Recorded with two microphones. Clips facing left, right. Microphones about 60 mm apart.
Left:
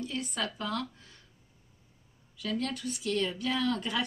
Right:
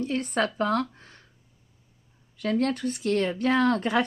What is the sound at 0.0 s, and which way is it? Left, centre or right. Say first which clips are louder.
Speech: right 8 dB; right.